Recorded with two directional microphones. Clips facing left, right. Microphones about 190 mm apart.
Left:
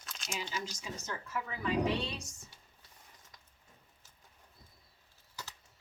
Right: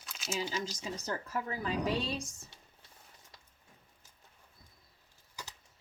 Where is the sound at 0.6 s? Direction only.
35° right (ahead or behind).